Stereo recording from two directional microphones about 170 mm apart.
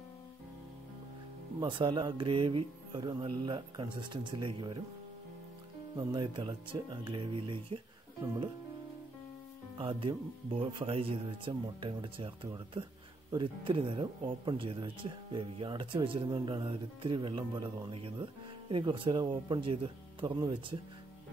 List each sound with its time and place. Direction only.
1.6 s speech: 30° right (ahead or behind)
5.9 s speech: 25° right (ahead or behind)
9.8 s speech: 30° right (ahead or behind)